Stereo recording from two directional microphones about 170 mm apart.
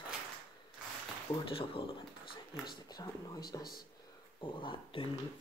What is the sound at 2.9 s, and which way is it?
Speech, 25° left (ahead or behind).